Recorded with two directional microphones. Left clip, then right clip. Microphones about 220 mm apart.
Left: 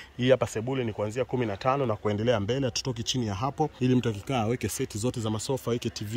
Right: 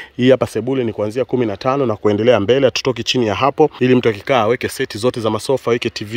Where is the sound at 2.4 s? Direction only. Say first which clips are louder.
Right 16 dB; 45° right (ahead or behind).